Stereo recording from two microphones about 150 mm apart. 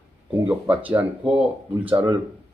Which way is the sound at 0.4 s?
10° right (ahead or behind).